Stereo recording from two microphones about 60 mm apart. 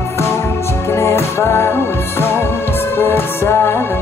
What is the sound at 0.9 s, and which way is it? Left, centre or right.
Music, left.